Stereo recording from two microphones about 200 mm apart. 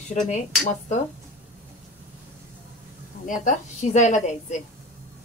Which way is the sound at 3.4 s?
35° left (ahead or behind).